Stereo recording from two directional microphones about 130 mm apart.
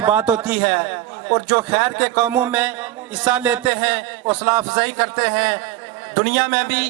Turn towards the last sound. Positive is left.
turn(degrees=-35)  # may be behind; listen again after turning